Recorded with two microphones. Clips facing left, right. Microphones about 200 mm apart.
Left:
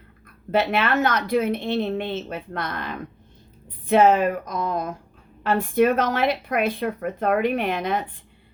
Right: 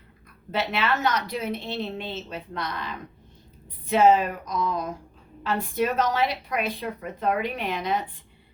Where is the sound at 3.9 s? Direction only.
55° left (ahead or behind).